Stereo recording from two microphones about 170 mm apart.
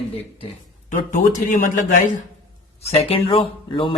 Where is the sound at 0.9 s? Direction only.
45° left (ahead or behind).